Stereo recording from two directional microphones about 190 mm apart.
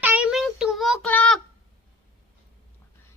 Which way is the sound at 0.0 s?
5° right (ahead or behind).